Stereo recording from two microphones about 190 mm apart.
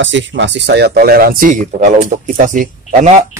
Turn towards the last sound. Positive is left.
turn(degrees=-40)  # may be behind; listen again after turning